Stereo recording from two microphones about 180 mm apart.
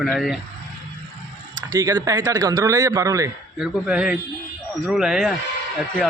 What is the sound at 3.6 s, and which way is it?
Speech, 5° right (ahead or behind).